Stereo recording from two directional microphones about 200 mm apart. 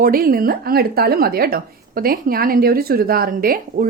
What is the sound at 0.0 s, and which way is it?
Speech, 45° right (ahead or behind).